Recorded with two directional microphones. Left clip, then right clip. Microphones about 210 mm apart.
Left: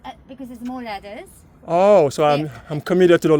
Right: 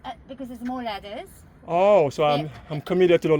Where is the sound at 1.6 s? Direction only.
45° left (ahead or behind).